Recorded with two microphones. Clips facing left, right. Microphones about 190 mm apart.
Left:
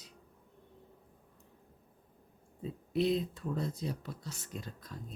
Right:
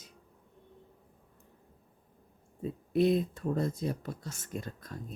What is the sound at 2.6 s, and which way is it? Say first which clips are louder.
Speech: right 5 dB; 50° right (ahead or behind).